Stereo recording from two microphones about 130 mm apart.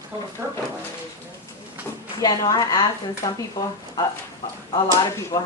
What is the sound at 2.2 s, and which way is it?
Speech, 30° left (ahead or behind).